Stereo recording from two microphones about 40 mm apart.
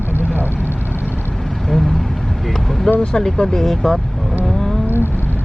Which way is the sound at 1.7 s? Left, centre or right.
Centre.